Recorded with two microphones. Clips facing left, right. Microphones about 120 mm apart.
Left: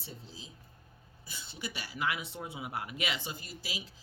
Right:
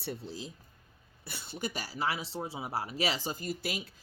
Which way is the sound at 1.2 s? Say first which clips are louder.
Right 5 dB; 55° right (ahead or behind).